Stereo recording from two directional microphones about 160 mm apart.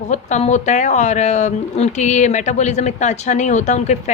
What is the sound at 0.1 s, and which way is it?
Speech, 50° left (ahead or behind).